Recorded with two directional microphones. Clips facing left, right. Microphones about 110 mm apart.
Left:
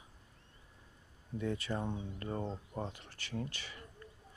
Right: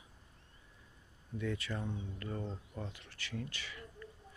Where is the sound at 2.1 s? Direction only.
30° left (ahead or behind).